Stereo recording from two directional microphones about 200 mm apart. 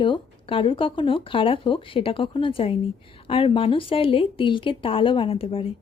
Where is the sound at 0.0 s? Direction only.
25° left (ahead or behind).